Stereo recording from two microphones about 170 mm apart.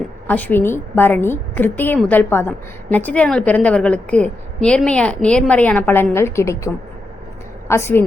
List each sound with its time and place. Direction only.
0.3 s a woman's voice: 10° left (ahead or behind)